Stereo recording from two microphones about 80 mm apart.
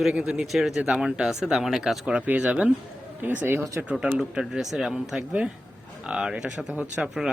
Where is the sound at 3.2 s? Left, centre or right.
Right.